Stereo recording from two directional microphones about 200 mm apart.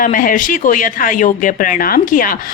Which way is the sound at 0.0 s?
40° left (ahead or behind).